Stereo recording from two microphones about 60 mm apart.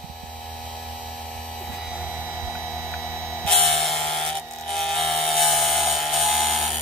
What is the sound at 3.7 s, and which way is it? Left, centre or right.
Wood, centre.